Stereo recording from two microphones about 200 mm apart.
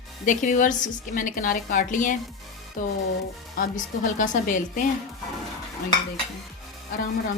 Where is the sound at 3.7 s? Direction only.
40° left (ahead or behind).